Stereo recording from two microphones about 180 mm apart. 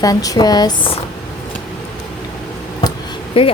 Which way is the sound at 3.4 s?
30° left (ahead or behind).